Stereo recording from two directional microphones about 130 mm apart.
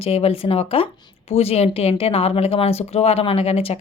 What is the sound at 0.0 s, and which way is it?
Speech, 50° left (ahead or behind).